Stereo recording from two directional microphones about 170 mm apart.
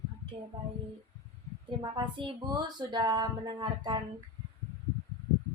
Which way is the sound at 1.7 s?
30° right (ahead or behind).